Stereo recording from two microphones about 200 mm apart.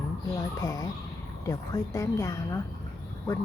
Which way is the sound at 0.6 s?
15° left (ahead or behind).